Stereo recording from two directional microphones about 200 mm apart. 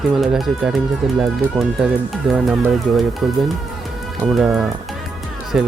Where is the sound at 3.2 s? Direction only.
Centre (ahead or behind).